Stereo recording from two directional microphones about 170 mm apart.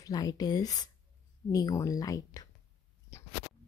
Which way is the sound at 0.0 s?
20° left (ahead or behind).